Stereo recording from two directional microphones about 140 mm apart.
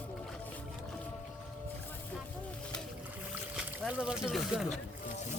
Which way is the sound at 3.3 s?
10° right (ahead or behind).